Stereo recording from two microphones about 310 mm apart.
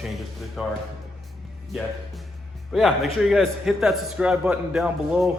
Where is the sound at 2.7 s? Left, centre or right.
Centre.